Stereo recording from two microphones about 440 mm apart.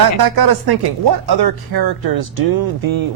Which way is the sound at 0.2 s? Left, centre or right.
Right.